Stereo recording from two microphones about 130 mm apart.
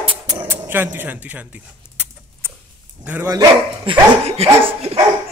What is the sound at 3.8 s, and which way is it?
Dog, 50° right (ahead or behind).